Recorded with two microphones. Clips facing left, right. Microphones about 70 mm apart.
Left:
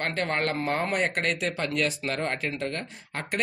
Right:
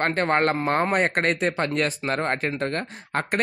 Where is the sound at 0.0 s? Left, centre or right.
Right.